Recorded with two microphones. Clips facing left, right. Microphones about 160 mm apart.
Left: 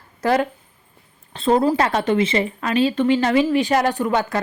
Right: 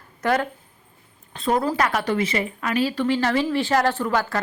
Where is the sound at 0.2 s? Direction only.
30° left (ahead or behind).